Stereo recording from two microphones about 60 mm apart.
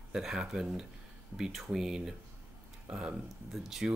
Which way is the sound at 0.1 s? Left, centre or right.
Centre.